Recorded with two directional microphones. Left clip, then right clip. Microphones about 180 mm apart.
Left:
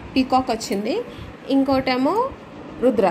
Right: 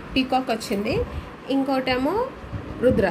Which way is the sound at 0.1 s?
10° left (ahead or behind).